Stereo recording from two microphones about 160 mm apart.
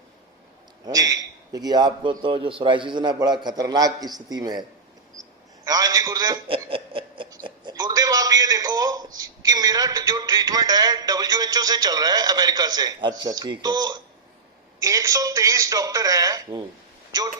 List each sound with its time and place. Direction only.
0.9 s speech: 20° right (ahead or behind)
5.6 s a man's voice: 25° right (ahead or behind)
7.3 s a sound: 25° right (ahead or behind)
9.1 s speech: 25° right (ahead or behind)